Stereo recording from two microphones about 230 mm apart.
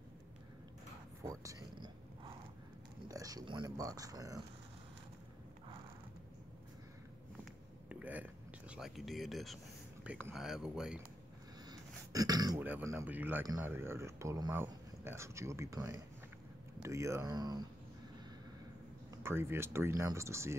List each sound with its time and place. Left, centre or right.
1.2 s a sound: centre
3.1 s speech: centre
7.9 s a sound: centre
10.0 s speech: centre
11.7 s speech: centre
19.2 s speech: centre